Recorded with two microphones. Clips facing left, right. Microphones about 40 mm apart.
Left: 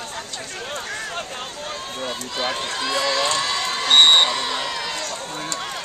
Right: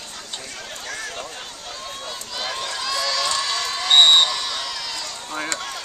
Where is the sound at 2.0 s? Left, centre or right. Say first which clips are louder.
Left 6 dB; left.